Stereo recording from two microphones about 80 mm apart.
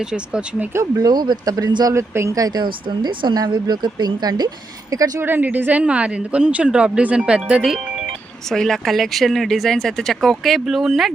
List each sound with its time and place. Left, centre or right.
0.1 s speech: centre
0.9 s speech: right
1.9 s speech: right
2.6 s speech: right
3.3 s speech: right
4.9 s speech: right
5.2 s speech: right
8.4 s speech: centre